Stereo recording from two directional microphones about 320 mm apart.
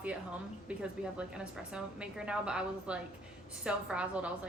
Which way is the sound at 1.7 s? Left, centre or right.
Centre.